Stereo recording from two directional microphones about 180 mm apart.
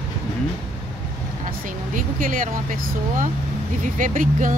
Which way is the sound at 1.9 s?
50° right (ahead or behind).